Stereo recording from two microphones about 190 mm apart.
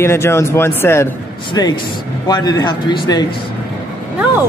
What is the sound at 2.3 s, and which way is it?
Speech, 20° left (ahead or behind).